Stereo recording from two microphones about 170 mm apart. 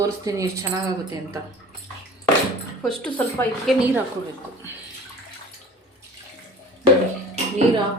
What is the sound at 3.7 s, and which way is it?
Speech, centre (ahead or behind).